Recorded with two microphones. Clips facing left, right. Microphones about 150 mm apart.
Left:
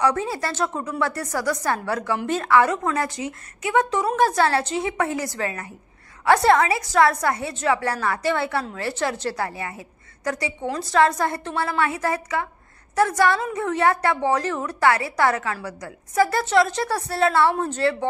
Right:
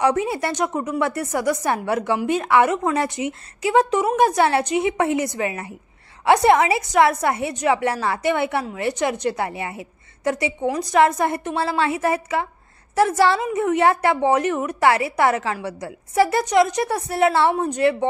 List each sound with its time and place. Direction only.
0.0 s a woman's voice: 20° right (ahead or behind)